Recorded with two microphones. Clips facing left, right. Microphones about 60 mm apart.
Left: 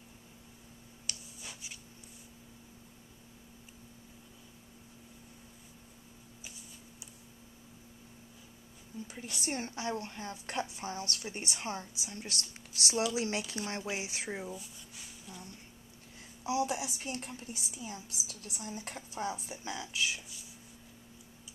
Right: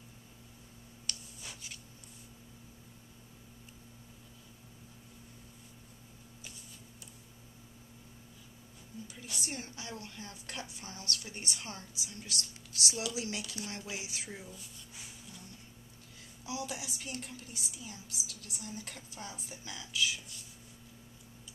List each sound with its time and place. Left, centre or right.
1.0 s a sound: centre
9.0 s a woman's voice: left
16.4 s a woman's voice: left